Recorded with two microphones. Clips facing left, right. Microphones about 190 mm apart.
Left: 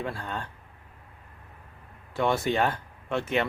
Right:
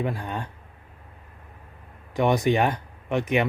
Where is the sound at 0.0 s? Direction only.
15° right (ahead or behind).